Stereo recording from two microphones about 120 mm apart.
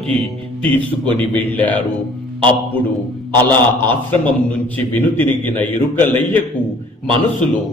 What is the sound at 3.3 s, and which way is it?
A man's voice, 15° left (ahead or behind).